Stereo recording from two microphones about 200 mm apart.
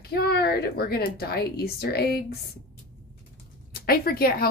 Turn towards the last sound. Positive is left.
turn(degrees=50)  # may be behind; listen again after turning